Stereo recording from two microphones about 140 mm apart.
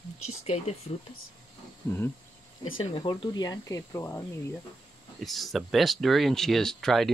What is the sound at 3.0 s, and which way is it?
Speech, 30° left (ahead or behind).